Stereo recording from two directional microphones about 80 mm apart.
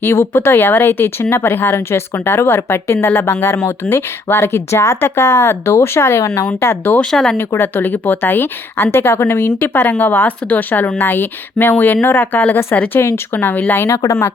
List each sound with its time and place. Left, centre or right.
0.0 s speech: left
6.5 s a woman's voice: left
7.0 s speech: centre
7.3 s a woman's voice: left